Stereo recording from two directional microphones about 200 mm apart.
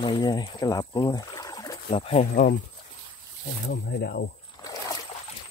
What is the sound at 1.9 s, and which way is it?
Speech, 30° left (ahead or behind).